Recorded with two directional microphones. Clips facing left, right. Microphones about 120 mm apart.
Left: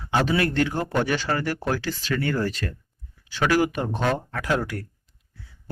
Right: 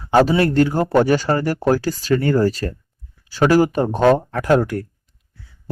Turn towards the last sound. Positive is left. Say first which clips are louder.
# right 9 dB
turn(degrees=-50)  # may be behind; listen again after turning